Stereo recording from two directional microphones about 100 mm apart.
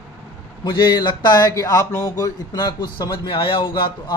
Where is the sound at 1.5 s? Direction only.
35° left (ahead or behind); by 3.9 s 55° left (ahead or behind).